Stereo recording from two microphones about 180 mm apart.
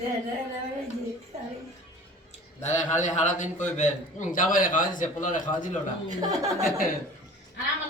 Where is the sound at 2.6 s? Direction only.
40° left (ahead or behind).